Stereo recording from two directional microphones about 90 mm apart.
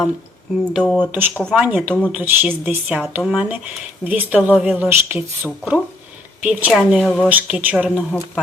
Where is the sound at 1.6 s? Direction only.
15° right (ahead or behind).